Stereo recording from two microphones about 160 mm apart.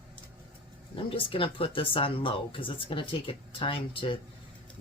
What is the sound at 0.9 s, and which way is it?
Speech, 35° left (ahead or behind).